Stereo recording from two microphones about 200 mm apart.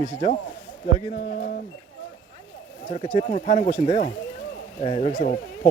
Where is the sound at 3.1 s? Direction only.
30° left (ahead or behind).